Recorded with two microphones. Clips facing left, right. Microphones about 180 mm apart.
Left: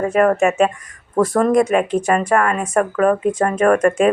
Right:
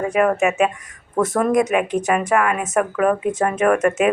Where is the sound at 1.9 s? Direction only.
20° right (ahead or behind).